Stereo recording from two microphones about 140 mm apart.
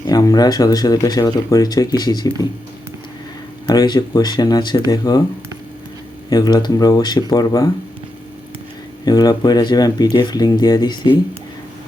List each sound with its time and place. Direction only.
0.1 s speech: 25° left (ahead or behind)
3.7 s speech: 30° left (ahead or behind)
6.3 s speech: 30° left (ahead or behind)
9.0 s speech: 30° left (ahead or behind)